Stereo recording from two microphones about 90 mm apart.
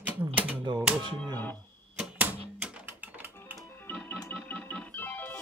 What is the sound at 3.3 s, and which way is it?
Music, 25° left (ahead or behind).